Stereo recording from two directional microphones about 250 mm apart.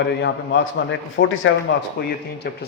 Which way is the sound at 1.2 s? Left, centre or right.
Left.